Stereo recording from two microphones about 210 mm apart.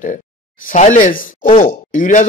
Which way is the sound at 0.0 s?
40° left (ahead or behind).